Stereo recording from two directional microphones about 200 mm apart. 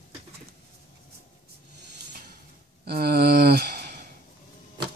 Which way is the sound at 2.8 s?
50° right (ahead or behind).